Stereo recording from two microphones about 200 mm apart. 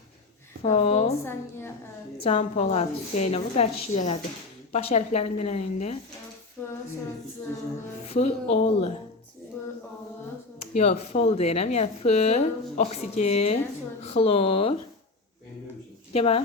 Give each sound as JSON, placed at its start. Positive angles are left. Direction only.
{"t": 0.6, "sound": "speech", "side_deg": 35}
{"t": 1.2, "sound": "a woman's voice", "side_deg": 10}
{"t": 2.2, "sound": "speech", "side_deg": 35}
{"t": 8.0, "sound": "speech", "side_deg": 30}
{"t": 9.6, "sound": "a sound", "side_deg": 15}
{"t": 10.8, "sound": "speech", "side_deg": 35}
{"t": 16.1, "sound": "speech", "side_deg": 30}